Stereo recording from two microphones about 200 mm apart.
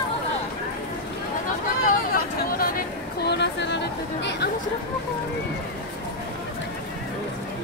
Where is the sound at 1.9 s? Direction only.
45° left (ahead or behind).